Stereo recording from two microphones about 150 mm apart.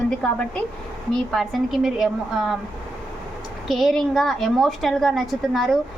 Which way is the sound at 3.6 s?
Centre (ahead or behind).